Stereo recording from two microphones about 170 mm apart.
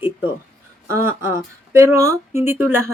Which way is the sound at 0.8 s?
15° right (ahead or behind).